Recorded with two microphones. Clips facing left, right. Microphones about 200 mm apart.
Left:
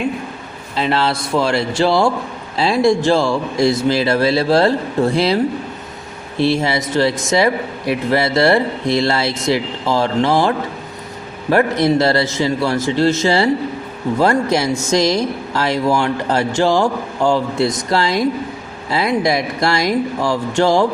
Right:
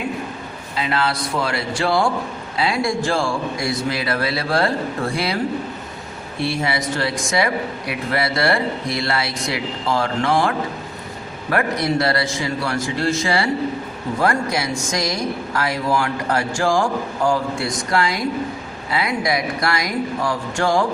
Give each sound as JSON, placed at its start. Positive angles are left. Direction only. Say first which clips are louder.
{"t": 0.9, "sound": "speech", "louder": "left 4 dB", "side_deg": 30}
{"t": 6.4, "sound": "speech", "louder": "left 6 dB", "side_deg": 25}